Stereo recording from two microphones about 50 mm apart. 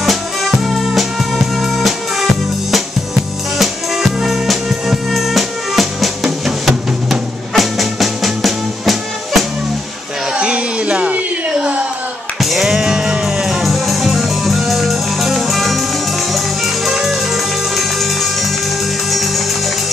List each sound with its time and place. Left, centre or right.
0.0 s music: centre
3.5 s music: centre
10.3 s a sound: right
12.4 s music: centre